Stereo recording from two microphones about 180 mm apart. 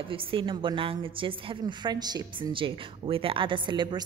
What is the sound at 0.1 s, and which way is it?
A woman's voice, 30° right (ahead or behind).